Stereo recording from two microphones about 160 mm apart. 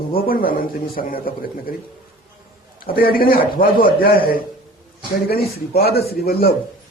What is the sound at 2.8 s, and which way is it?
A man's voice, 65° left (ahead or behind).